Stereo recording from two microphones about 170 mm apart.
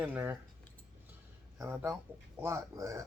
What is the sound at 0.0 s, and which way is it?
Speech, 10° right (ahead or behind).